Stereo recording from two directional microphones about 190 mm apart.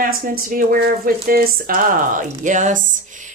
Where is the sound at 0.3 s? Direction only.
50° right (ahead or behind).